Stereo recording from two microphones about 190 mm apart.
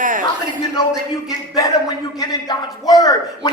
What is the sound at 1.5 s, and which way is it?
Speech, 20° left (ahead or behind).